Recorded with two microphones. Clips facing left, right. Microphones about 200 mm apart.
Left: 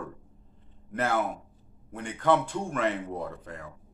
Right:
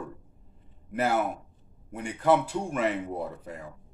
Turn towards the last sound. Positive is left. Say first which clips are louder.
# right 1 dB
turn(degrees=-10)  # may be behind; listen again after turning